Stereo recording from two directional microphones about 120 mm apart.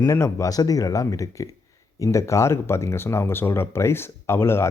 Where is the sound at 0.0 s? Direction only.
25° left (ahead or behind).